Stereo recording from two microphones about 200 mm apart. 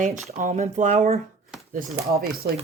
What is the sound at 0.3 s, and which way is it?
Speech, 40° right (ahead or behind).